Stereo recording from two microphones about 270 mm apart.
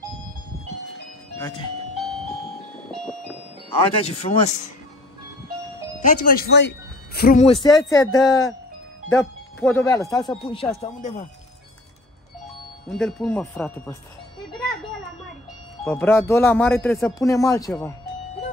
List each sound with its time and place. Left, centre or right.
2.0 s music: centre
3.8 s speech: left
6.0 s speech: left
7.4 s speech: centre
9.1 s speech: centre; by 11.2 s left
12.8 s speech: centre
15.8 s speech: centre